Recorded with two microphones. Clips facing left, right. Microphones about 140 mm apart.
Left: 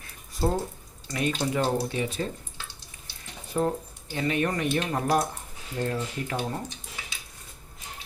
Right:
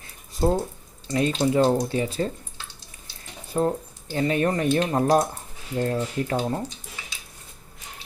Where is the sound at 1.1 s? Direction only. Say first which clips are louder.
Right 6 dB; 30° right (ahead or behind).